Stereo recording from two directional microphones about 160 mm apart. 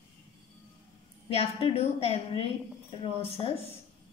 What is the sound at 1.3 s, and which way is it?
A woman's voice, 40° left (ahead or behind).